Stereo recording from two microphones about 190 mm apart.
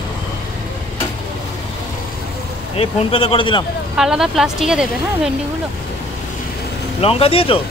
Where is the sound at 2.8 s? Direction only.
30° left (ahead or behind).